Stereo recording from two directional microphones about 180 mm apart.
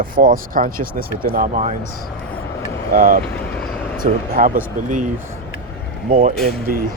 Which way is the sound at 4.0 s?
50° right (ahead or behind).